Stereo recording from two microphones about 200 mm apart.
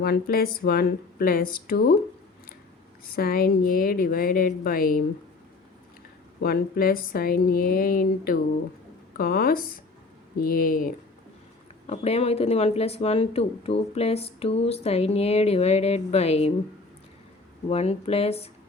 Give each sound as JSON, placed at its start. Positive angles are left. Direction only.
{"t": 0.0, "sound": "a woman's voice", "side_deg": 50}
{"t": 3.0, "sound": "a woman's voice", "side_deg": 50}
{"t": 6.4, "sound": "a woman's voice", "side_deg": 50}
{"t": 11.9, "sound": "speech", "side_deg": 30}
{"t": 17.7, "sound": "speech", "side_deg": 30}